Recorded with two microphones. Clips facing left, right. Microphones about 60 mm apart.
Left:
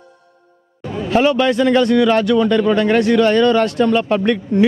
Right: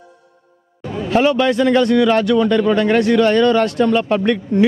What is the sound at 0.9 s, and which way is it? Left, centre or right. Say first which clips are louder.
A man's voice: even; left.